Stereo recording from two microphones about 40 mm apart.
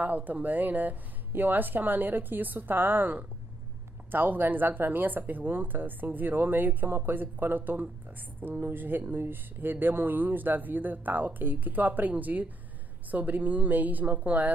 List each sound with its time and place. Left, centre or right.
0.0 s speech: right